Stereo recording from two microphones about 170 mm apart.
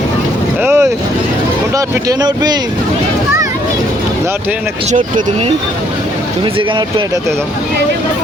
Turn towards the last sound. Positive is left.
turn(degrees=-25)  # may be behind; listen again after turning